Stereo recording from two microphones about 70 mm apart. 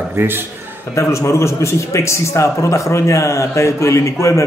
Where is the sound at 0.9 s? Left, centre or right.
Left.